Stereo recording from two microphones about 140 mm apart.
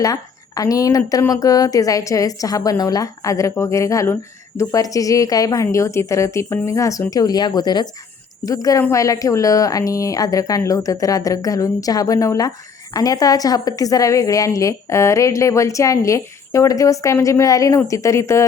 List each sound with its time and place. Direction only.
0.0 s speech: 25° left (ahead or behind)